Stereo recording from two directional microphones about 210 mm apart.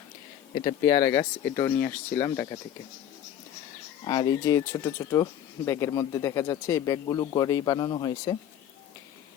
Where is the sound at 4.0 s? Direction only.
20° left (ahead or behind).